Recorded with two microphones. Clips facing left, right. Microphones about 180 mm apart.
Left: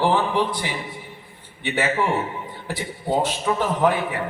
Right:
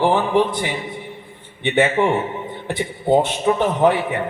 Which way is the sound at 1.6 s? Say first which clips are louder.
Right 6 dB; 25° right (ahead or behind).